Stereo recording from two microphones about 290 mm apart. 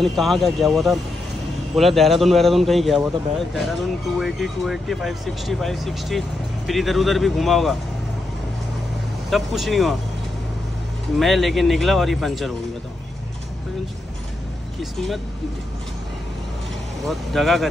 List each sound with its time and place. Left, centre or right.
0.0 s speech: centre
9.3 s speech: centre
11.1 s speech: centre
14.8 s speech: centre
17.1 s speech: centre